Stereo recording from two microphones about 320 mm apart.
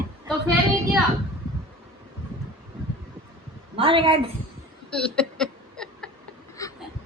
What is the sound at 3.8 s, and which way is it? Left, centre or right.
Speech, centre.